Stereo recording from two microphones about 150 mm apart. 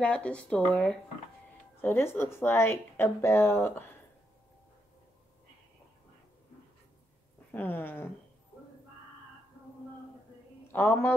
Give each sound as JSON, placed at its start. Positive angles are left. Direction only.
{"t": 0.0, "sound": "a woman's voice", "side_deg": 10}
{"t": 7.5, "sound": "a woman's voice", "side_deg": 10}
{"t": 10.7, "sound": "a woman's voice", "side_deg": 15}